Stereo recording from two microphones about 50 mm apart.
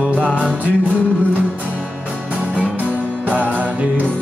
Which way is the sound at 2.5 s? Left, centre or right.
Right.